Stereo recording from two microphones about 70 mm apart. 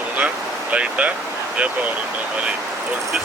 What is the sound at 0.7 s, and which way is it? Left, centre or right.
Speech, centre.